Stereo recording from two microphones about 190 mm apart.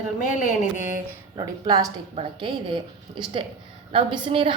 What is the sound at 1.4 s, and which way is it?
A woman's voice, 20° right (ahead or behind).